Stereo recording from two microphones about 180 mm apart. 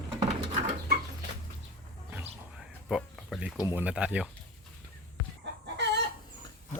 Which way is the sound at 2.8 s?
Centre (ahead or behind).